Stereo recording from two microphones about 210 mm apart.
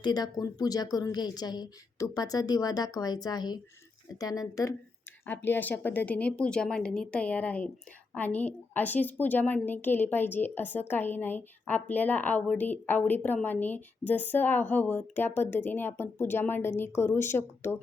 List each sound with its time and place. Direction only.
0.0 s a woman's voice: 20° left (ahead or behind)